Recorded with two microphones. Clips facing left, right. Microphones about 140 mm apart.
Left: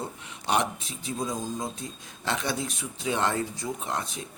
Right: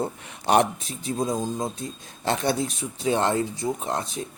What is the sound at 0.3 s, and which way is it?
Speech, 55° right (ahead or behind).